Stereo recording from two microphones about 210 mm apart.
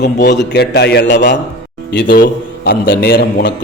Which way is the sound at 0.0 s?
50° left (ahead or behind).